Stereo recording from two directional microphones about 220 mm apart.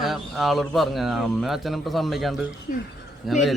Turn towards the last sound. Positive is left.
turn(degrees=0)  # may be behind; listen again after turning